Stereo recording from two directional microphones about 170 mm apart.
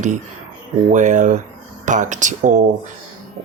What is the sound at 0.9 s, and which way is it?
Speech, 45° right (ahead or behind).